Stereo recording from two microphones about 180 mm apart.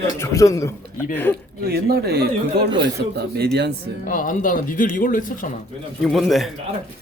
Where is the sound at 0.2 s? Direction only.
15° left (ahead or behind).